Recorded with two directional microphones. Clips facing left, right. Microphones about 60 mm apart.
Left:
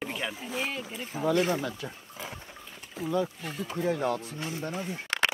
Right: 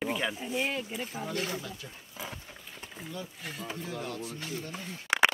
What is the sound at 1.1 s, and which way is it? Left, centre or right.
Speech, left.